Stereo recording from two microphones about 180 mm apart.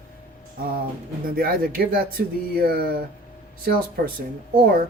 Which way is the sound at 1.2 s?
55° right (ahead or behind).